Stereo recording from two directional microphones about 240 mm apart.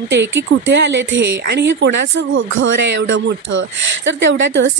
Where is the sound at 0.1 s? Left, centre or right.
Right.